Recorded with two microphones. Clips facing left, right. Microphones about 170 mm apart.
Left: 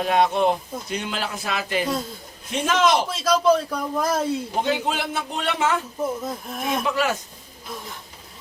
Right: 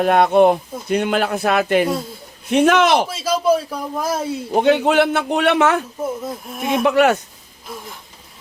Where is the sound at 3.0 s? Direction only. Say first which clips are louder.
Right 1 dB; 5° right (ahead or behind).